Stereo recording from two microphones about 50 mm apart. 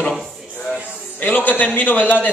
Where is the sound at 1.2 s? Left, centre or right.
Left.